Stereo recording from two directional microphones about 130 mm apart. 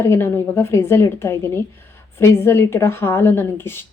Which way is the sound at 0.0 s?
20° left (ahead or behind).